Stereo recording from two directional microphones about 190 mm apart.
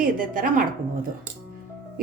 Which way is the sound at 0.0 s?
45° right (ahead or behind).